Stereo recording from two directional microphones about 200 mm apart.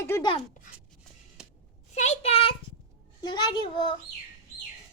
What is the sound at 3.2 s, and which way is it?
Speech, 20° left (ahead or behind).